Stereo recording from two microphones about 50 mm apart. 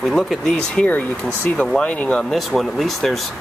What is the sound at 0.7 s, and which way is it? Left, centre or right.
Speech, left.